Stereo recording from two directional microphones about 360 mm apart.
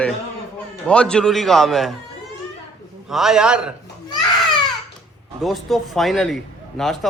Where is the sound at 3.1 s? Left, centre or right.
Centre.